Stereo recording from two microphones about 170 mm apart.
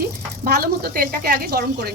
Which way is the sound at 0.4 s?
65° right (ahead or behind).